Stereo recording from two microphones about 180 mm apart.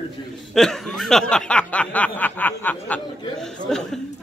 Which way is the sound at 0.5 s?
5° left (ahead or behind).